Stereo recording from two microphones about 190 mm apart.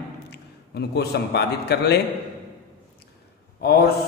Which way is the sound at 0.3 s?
60° left (ahead or behind).